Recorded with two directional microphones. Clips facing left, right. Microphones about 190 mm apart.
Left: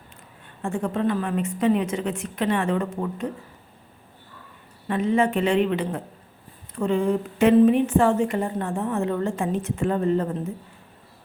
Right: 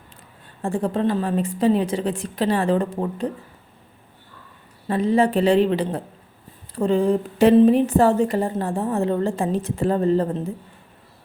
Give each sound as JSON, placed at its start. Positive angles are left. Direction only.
{"t": 0.6, "sound": "speech", "side_deg": -35}
{"t": 4.9, "sound": "speech", "side_deg": -35}